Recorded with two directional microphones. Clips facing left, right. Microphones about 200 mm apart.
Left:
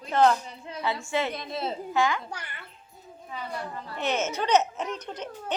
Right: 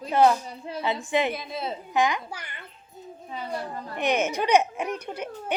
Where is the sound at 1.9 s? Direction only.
15° right (ahead or behind).